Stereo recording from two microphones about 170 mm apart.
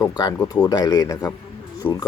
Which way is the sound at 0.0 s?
25° left (ahead or behind).